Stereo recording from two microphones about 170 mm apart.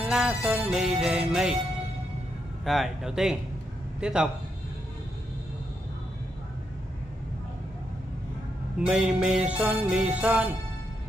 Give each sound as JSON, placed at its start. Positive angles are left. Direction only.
{"t": 0.0, "sound": "music", "side_deg": -5}
{"t": 2.6, "sound": "music", "side_deg": 0}
{"t": 8.8, "sound": "music", "side_deg": -5}